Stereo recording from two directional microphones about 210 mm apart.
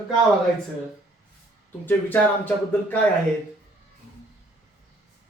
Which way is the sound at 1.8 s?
10° left (ahead or behind).